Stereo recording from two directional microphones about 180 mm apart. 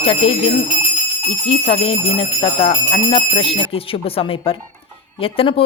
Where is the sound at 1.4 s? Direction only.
30° left (ahead or behind).